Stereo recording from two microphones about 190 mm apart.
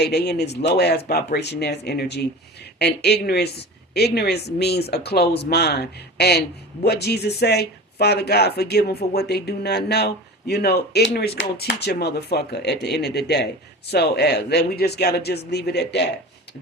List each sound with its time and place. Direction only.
0.0 s speech: 55° left (ahead or behind)